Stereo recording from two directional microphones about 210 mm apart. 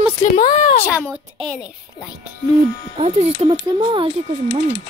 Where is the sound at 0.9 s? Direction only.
10° left (ahead or behind).